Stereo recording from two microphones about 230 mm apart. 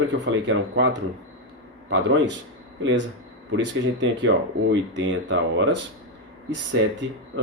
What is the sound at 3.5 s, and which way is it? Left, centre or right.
Speech, right.